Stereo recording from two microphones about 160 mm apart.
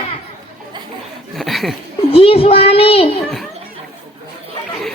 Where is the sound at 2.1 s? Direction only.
35° left (ahead or behind).